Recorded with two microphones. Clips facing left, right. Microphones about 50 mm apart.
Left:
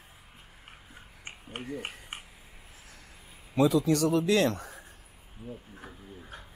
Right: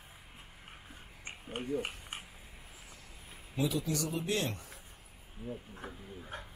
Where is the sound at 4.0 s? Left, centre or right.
Left.